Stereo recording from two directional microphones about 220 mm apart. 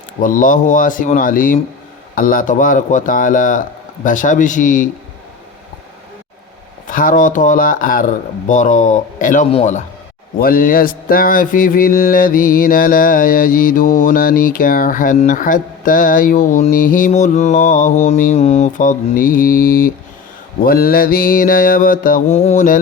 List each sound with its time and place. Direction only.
0.2 s mantra: 35° left (ahead or behind)
6.8 s mantra: 40° left (ahead or behind)
10.4 s mantra: 40° left (ahead or behind)